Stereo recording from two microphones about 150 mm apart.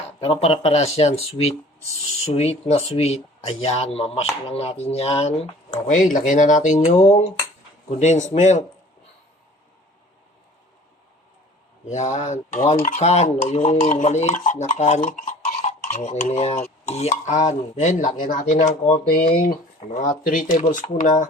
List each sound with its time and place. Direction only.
0.3 s speech: 40° left (ahead or behind)
5.7 s speech: 55° left (ahead or behind)
11.9 s speech: 50° left (ahead or behind)
15.8 s stir: 50° left (ahead or behind)
16.8 s speech: 45° left (ahead or behind)
19.0 s speech: 90° left
19.4 s speech: 70° left (ahead or behind)